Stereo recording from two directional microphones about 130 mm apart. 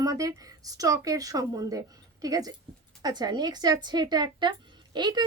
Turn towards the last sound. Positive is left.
turn(degrees=-35)  # may be behind; listen again after turning